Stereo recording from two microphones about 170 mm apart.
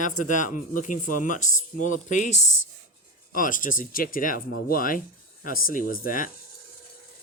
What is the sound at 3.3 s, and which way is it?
Speech, 50° left (ahead or behind).